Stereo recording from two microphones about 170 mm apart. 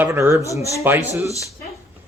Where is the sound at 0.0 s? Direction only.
15° right (ahead or behind).